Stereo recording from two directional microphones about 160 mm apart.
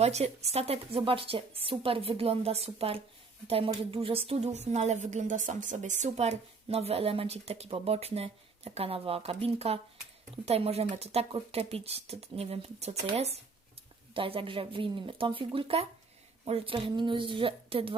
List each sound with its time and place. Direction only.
0.0 s a woman's voice: 40° right (ahead or behind)